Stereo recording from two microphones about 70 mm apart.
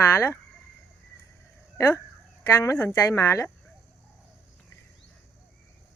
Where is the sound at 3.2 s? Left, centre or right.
Left.